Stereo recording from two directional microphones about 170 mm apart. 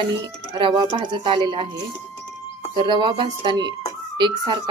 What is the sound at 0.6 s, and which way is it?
Speech, 30° right (ahead or behind).